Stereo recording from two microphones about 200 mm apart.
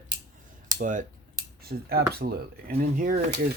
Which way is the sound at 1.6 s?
50° right (ahead or behind).